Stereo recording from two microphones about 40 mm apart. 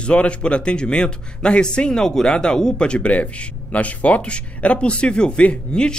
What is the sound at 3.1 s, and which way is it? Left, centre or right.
Speech, left.